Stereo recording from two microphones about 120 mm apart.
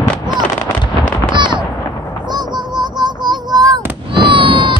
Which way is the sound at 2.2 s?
35° right (ahead or behind).